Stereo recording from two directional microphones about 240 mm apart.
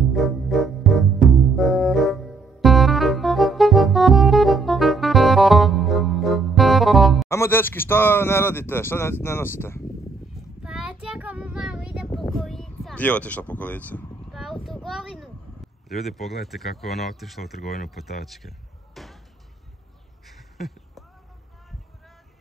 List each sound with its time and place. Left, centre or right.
0.1 s music: centre
7.2 s speech: centre
10.6 s child singing: centre
19.0 s basketball bounce: centre
20.2 s a sound: centre